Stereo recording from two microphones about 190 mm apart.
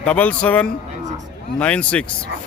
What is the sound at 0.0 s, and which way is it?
Speech, 5° left (ahead or behind).